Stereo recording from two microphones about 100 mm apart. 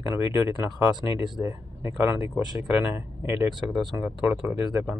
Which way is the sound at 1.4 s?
30° right (ahead or behind).